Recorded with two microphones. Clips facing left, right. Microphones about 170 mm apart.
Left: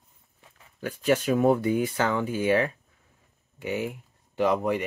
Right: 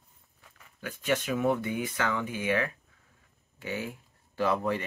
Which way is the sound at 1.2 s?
35° left (ahead or behind).